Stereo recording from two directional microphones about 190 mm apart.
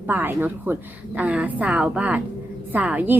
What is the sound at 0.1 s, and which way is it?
A woman's voice, 10° right (ahead or behind).